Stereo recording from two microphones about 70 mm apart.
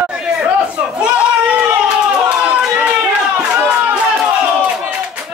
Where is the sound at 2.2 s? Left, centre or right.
Centre.